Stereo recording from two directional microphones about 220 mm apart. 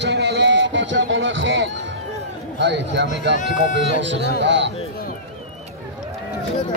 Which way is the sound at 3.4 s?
35° left (ahead or behind).